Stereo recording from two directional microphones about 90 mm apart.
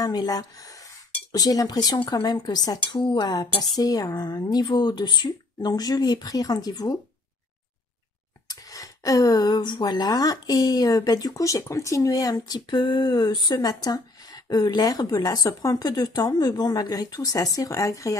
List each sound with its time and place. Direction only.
0.0 s speech: 50° left (ahead or behind)
8.5 s speech: 40° left (ahead or behind)